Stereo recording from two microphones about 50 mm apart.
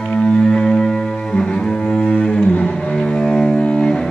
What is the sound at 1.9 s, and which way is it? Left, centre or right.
Cello, left.